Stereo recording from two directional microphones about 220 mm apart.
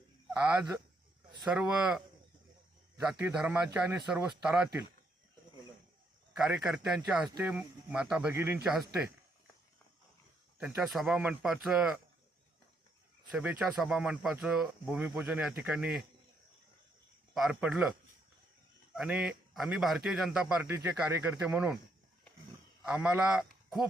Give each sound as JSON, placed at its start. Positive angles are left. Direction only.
{"t": 0.3, "sound": "speech", "side_deg": -5}
{"t": 3.1, "sound": "speech", "side_deg": -5}
{"t": 6.3, "sound": "speech", "side_deg": 0}
{"t": 10.8, "sound": "speech", "side_deg": 0}
{"t": 13.3, "sound": "speech", "side_deg": -5}
{"t": 17.3, "sound": "speech", "side_deg": -5}
{"t": 18.9, "sound": "speech", "side_deg": -5}
{"t": 22.8, "sound": "speech", "side_deg": -5}
{"t": 23.6, "sound": "a sound", "side_deg": 0}